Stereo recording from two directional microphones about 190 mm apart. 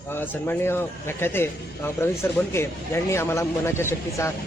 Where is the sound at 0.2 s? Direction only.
10° left (ahead or behind).